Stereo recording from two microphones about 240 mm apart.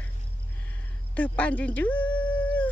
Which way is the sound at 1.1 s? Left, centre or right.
Centre.